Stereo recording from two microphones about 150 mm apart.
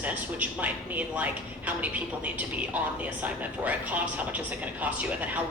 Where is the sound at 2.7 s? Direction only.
10° right (ahead or behind).